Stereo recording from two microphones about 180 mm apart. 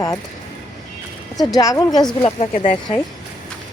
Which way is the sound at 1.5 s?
20° left (ahead or behind).